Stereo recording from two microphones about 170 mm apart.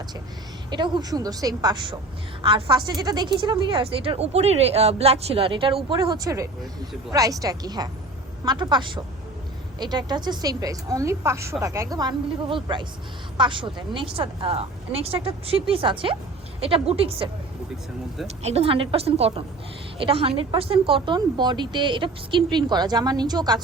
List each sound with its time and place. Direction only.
0.7 s a woman's voice: 25° right (ahead or behind)
18.4 s a woman's voice: 35° right (ahead or behind)